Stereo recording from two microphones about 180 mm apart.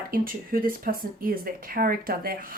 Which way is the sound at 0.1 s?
50° right (ahead or behind).